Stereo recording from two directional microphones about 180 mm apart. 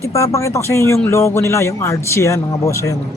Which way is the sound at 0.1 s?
15° left (ahead or behind).